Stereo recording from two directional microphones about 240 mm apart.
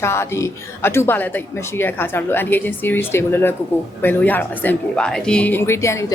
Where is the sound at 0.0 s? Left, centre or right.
Centre.